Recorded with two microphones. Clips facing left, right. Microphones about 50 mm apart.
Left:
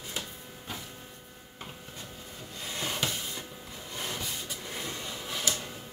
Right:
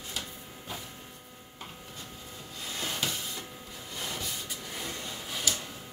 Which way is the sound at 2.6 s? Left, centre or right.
Centre.